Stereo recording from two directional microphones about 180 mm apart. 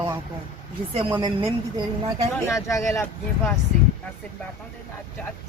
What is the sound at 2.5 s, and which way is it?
Speech, 15° left (ahead or behind).